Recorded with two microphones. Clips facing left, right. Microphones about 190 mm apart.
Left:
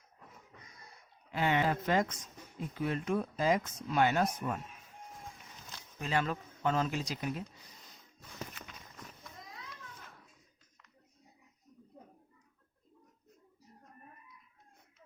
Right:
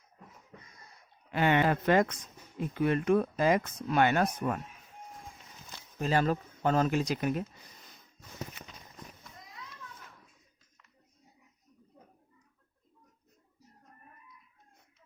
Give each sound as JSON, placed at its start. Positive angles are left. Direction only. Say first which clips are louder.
{"t": 1.3, "sound": "speech", "louder": "right 4 dB", "side_deg": -65}
{"t": 6.0, "sound": "speech", "louder": "right 5 dB", "side_deg": -40}